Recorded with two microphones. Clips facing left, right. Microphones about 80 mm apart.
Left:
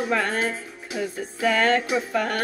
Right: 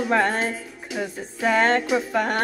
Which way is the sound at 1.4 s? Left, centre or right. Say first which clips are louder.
Right 1 dB; right.